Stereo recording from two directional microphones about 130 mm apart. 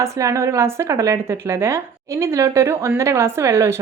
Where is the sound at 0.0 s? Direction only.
25° right (ahead or behind).